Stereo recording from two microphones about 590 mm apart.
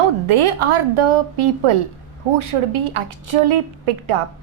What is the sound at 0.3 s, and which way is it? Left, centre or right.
A woman's voice, right.